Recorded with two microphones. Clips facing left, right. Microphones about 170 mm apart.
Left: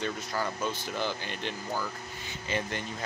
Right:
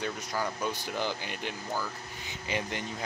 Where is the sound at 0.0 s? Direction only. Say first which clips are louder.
Left 1 dB; 10° right (ahead or behind).